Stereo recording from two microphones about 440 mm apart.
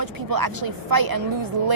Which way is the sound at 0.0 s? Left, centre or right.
Right.